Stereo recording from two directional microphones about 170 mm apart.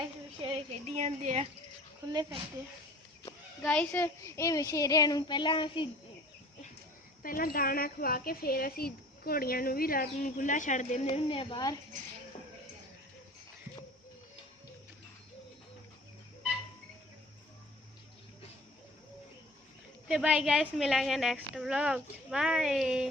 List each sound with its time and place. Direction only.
0.4 s a woman's voice: 35° right (ahead or behind)
3.6 s a child's voice: 5° left (ahead or behind); by 5.9 s 30° left (ahead or behind)
7.2 s a woman's voice: 55° left (ahead or behind)
11.1 s a child's voice: 30° left (ahead or behind)
20.1 s a woman's voice: 5° right (ahead or behind)